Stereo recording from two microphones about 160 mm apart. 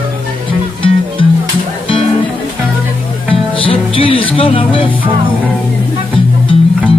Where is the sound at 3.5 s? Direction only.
35° left (ahead or behind).